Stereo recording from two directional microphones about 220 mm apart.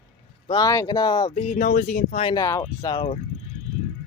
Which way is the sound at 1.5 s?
35° left (ahead or behind).